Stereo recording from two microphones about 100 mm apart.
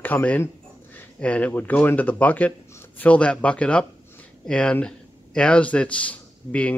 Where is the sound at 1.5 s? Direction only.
15° left (ahead or behind).